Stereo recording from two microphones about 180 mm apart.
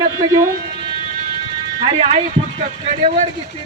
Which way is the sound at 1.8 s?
35° right (ahead or behind).